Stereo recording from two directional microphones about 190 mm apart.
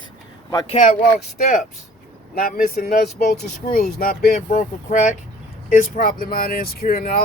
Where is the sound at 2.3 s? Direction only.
50° left (ahead or behind).